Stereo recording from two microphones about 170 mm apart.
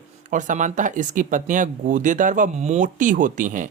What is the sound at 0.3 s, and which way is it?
Speech, 50° right (ahead or behind).